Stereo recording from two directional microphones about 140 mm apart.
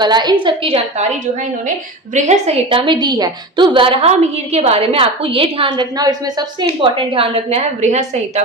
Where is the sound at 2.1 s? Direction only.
50° right (ahead or behind).